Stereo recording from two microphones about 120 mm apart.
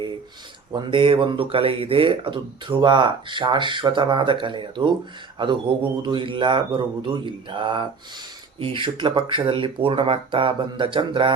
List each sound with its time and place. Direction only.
0.7 s speech: 40° right (ahead or behind)
6.0 s speech: 40° right (ahead or behind)